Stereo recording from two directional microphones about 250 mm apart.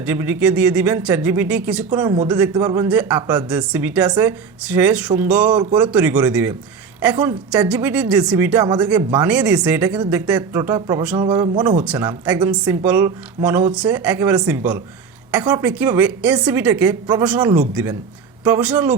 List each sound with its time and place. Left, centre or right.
0.0 s speech: centre
11.9 s speech: centre